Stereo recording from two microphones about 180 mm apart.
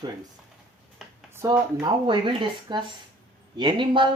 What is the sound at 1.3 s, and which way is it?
Speech, 15° right (ahead or behind).